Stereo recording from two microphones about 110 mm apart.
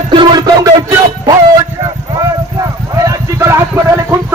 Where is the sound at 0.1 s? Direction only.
50° right (ahead or behind).